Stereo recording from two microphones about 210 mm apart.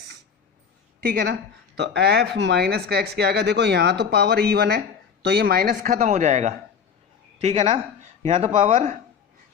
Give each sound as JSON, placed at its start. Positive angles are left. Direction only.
{"t": 1.0, "sound": "speech", "side_deg": -45}